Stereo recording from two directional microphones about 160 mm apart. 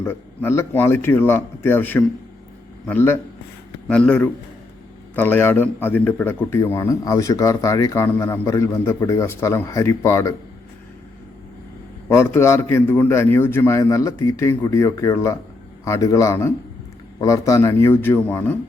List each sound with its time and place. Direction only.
0.0 s a man's voice: 15° left (ahead or behind)
12.0 s a man's voice: 15° left (ahead or behind)